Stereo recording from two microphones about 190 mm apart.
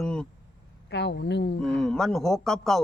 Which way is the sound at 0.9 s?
65° left (ahead or behind).